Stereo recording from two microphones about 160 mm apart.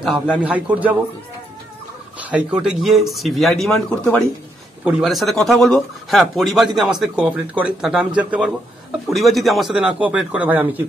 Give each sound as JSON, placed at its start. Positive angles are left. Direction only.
{"t": 0.3, "sound": "a man's voice", "side_deg": -10}
{"t": 2.1, "sound": "a man's voice", "side_deg": -10}